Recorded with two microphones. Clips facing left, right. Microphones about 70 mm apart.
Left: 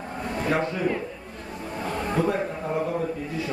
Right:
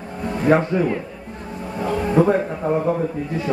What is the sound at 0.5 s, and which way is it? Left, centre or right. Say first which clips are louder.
Speech: right 10 dB; right.